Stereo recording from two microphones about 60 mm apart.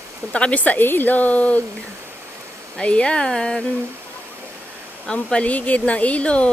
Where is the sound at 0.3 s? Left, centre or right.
Left.